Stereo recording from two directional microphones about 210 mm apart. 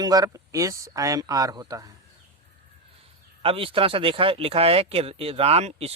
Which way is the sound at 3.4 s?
25° right (ahead or behind).